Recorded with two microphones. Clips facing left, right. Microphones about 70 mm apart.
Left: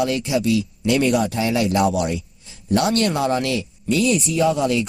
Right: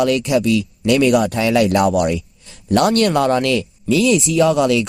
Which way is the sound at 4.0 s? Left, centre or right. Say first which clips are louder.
Right 4 dB; right.